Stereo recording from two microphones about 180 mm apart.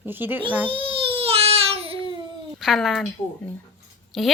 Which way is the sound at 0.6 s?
30° right (ahead or behind).